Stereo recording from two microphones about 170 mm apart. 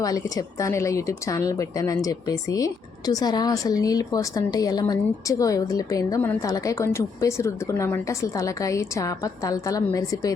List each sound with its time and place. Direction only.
0.0 s speech: 20° left (ahead or behind)